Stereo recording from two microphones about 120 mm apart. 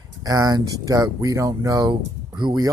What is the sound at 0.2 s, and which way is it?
Speech, 30° right (ahead or behind).